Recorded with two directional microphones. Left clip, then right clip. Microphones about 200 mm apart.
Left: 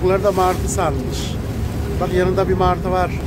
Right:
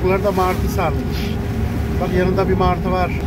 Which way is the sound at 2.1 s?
5° left (ahead or behind).